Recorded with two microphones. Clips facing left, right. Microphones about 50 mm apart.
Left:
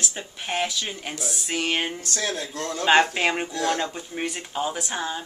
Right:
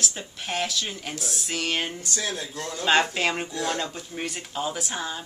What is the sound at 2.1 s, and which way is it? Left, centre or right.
Speech, left.